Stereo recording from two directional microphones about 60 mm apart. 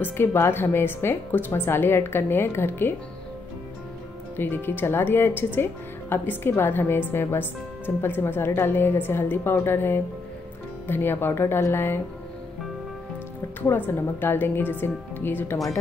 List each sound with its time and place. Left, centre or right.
0.0 s speech: left
4.4 s speech: left
13.6 s speech: left